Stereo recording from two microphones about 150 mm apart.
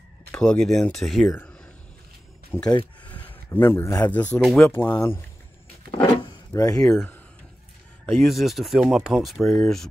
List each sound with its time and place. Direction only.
0.3 s speech: 5° left (ahead or behind)
2.5 s a man's voice: 15° left (ahead or behind)
5.9 s a sound: 20° left (ahead or behind)
6.9 s speech: 15° left (ahead or behind)
8.0 s speech: centre (ahead or behind)